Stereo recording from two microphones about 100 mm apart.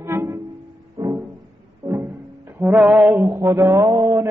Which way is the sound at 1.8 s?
25° right (ahead or behind).